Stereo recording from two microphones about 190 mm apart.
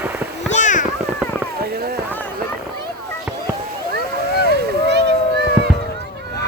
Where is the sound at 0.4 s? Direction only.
40° left (ahead or behind).